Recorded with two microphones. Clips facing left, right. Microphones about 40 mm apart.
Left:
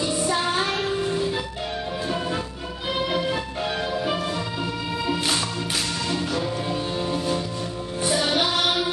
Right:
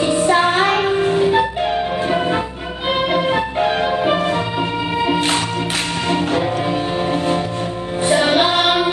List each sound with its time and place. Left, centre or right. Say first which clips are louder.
0.0 s music: right 9 dB; right
8.1 s music: right 8 dB; right